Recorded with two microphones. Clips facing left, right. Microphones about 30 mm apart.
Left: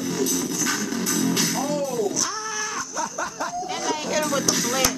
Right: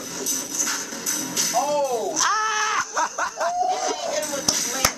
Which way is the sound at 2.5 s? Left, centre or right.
Right.